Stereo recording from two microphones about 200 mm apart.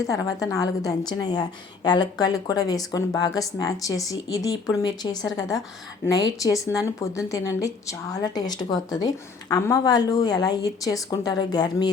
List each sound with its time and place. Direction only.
0.0 s a woman's voice: 15° left (ahead or behind)